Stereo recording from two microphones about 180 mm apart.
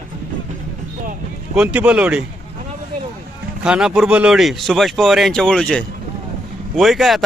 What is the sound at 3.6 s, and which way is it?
Speech, 5° right (ahead or behind).